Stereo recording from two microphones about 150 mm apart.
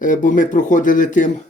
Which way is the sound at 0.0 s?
60° left (ahead or behind).